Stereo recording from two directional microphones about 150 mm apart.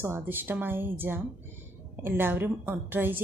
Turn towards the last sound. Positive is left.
turn(degrees=-15)  # may be behind; listen again after turning